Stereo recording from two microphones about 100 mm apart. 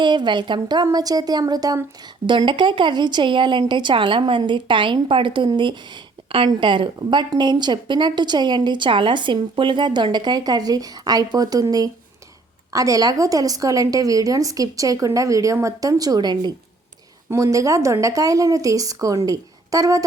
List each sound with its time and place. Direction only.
0.0 s a woman's voice: 50° right (ahead or behind)
2.2 s a woman's voice: 50° right (ahead or behind)
17.2 s a woman's voice: 30° right (ahead or behind)